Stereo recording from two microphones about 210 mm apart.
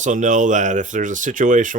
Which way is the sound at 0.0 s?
35° right (ahead or behind).